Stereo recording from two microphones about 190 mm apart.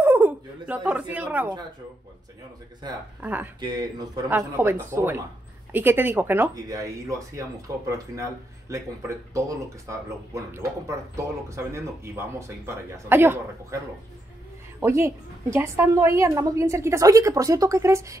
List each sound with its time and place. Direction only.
0.0 s a sound: 10° right (ahead or behind)
3.2 s speech: 10° right (ahead or behind)
3.6 s speech: 20° right (ahead or behind)
14.8 s speech: 15° right (ahead or behind)